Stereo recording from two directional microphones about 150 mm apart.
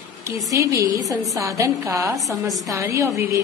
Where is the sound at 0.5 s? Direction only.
20° right (ahead or behind).